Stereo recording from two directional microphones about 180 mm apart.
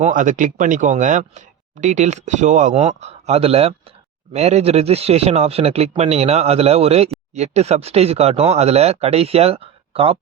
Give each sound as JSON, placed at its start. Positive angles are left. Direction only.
{"t": 0.0, "sound": "speech", "side_deg": -45}